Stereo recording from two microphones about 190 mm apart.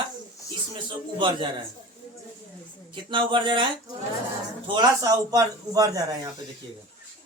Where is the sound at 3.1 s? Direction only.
25° right (ahead or behind).